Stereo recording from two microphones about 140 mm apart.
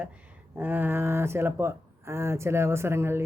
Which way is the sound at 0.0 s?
10° right (ahead or behind).